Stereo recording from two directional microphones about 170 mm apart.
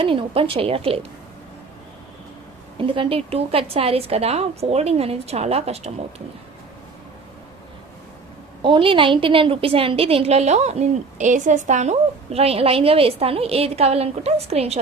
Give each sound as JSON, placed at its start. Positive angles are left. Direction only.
{"t": 0.0, "sound": "a woman's voice", "side_deg": -30}
{"t": 2.7, "sound": "a woman's voice", "side_deg": -30}
{"t": 8.6, "sound": "a woman's voice", "side_deg": -30}